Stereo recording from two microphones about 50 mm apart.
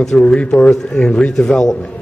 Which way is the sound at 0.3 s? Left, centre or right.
Centre.